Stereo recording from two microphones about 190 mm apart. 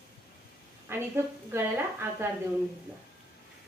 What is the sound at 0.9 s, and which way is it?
Speech, 10° right (ahead or behind).